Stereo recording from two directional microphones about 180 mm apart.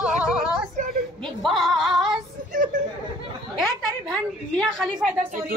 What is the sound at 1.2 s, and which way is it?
A woman's voice, centre (ahead or behind).